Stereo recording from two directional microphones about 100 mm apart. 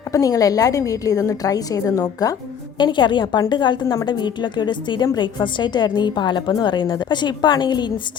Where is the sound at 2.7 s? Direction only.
50° left (ahead or behind).